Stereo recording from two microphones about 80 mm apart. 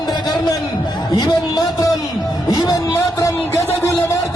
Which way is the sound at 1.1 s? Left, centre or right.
Left.